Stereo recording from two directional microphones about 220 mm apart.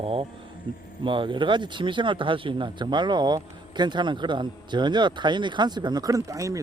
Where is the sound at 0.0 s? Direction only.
25° right (ahead or behind).